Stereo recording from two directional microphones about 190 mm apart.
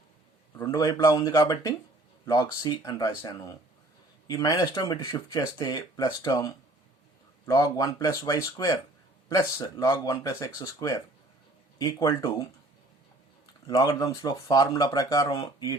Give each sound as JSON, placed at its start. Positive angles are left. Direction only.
{"t": 0.6, "sound": "speech", "side_deg": 20}
{"t": 13.7, "sound": "speech", "side_deg": 20}